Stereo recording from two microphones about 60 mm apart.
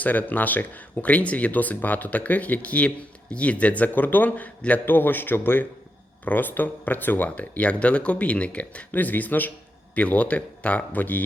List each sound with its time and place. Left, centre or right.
0.0 s speech: left